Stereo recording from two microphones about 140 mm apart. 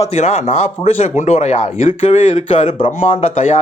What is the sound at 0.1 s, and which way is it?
Speech, 50° left (ahead or behind).